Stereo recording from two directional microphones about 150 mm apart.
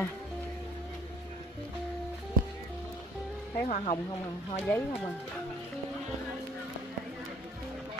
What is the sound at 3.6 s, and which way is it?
Speech, 50° left (ahead or behind).